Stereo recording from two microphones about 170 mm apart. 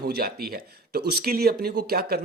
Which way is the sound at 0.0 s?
65° right (ahead or behind).